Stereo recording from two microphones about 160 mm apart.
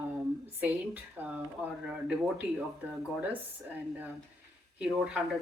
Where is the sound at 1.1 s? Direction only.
10° right (ahead or behind).